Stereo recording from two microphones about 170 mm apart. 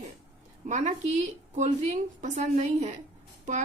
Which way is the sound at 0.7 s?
45° right (ahead or behind).